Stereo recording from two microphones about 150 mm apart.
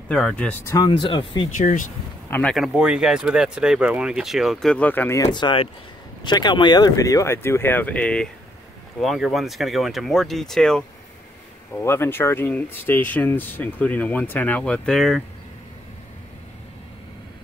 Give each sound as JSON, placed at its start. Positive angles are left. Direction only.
{"t": 0.1, "sound": "speech", "side_deg": 5}
{"t": 0.7, "sound": "speech", "side_deg": 30}
{"t": 1.6, "sound": "speech", "side_deg": 60}
{"t": 2.2, "sound": "speech", "side_deg": 15}
{"t": 2.5, "sound": "speech", "side_deg": -5}
{"t": 11.8, "sound": "speech", "side_deg": 15}